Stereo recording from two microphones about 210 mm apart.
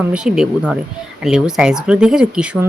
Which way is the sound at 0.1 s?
5° right (ahead or behind).